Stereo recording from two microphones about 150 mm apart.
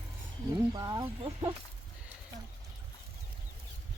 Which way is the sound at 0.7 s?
25° right (ahead or behind).